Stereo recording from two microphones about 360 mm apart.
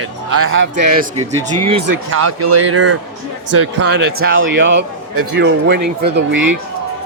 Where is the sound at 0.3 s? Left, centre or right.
Right.